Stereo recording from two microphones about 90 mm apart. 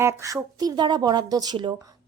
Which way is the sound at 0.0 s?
35° right (ahead or behind).